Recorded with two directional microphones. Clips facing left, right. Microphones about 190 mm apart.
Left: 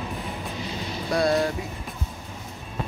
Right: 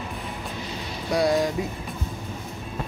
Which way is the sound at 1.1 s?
15° right (ahead or behind).